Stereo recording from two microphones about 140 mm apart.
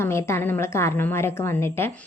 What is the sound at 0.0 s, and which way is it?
Speech, 20° left (ahead or behind).